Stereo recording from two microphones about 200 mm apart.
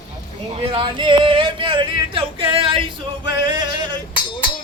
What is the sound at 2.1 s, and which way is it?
Male singing, 25° right (ahead or behind).